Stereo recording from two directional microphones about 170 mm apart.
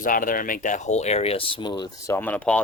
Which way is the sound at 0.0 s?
55° left (ahead or behind).